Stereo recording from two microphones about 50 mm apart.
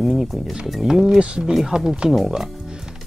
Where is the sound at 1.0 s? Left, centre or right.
Centre.